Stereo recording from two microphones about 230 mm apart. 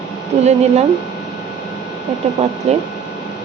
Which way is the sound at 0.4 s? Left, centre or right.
Right.